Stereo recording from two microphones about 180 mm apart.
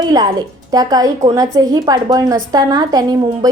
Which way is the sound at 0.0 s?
20° right (ahead or behind).